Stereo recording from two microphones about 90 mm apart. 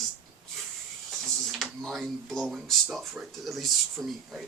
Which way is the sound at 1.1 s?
5° left (ahead or behind).